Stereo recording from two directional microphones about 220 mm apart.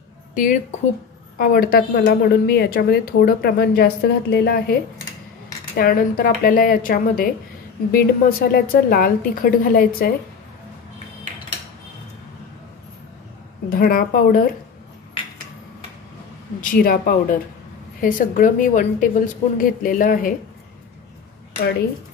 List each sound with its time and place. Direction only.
0.3 s a woman's voice: 35° left (ahead or behind)
5.8 s a woman's voice: 40° left (ahead or behind)
13.7 s a woman's voice: 40° left (ahead or behind)
16.6 s a woman's voice: 40° left (ahead or behind)
18.0 s a woman's voice: 40° left (ahead or behind)